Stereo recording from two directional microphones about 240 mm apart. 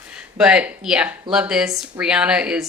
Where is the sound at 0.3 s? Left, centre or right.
Centre.